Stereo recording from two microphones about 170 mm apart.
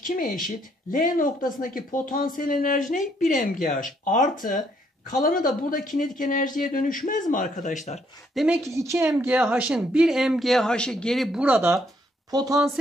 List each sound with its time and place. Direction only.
0.0 s a man's voice: 50° left (ahead or behind)
8.6 s speech: 15° right (ahead or behind)
12.3 s speech: 20° right (ahead or behind)